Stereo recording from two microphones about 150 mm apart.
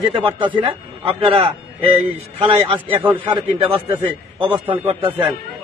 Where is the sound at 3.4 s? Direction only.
35° right (ahead or behind).